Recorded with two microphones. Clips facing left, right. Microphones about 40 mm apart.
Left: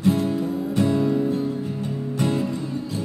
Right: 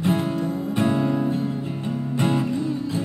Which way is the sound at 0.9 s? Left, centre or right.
Right.